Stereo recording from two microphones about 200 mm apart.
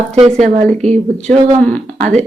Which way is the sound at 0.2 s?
35° right (ahead or behind).